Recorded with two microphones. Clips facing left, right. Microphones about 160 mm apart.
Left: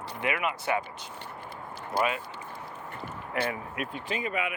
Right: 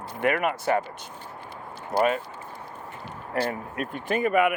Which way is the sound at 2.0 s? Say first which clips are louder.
Right 5 dB; 45° right (ahead or behind).